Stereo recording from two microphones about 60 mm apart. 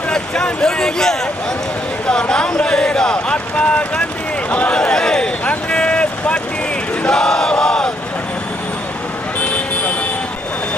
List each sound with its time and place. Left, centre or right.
0.1 s speech: centre
4.5 s a sound: centre
7.0 s battle cry: centre
9.4 s vehicle: left